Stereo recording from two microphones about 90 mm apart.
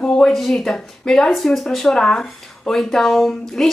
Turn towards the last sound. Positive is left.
turn(degrees=5)  # may be behind; listen again after turning